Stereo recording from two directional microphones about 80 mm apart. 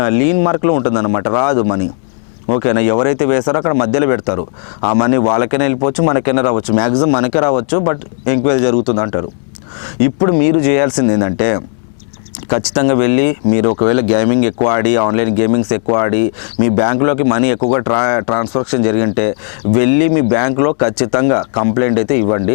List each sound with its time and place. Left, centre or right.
0.0 s speech: centre
12.6 s speech: centre